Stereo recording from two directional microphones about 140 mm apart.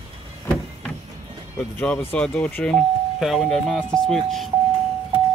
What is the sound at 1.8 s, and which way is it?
Speech, 10° left (ahead or behind).